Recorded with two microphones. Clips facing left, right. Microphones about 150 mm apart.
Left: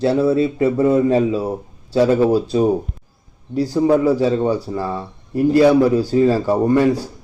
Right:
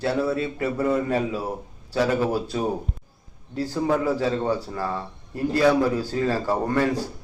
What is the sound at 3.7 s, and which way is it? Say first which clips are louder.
Speech: left 8 dB; 15° left (ahead or behind).